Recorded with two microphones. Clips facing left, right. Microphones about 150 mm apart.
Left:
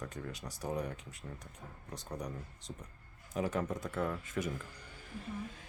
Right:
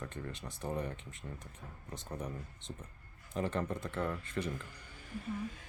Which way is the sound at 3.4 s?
5° left (ahead or behind).